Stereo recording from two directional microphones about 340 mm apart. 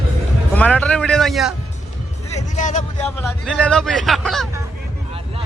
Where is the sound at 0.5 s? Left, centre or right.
Centre.